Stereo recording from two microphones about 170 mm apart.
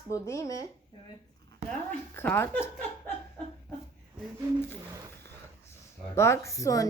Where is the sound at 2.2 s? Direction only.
15° left (ahead or behind).